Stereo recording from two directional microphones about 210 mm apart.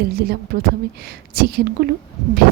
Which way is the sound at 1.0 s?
50° right (ahead or behind).